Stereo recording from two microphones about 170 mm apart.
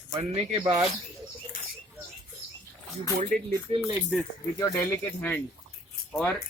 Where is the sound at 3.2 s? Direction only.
50° right (ahead or behind).